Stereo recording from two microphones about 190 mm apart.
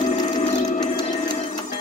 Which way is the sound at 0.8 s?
20° left (ahead or behind).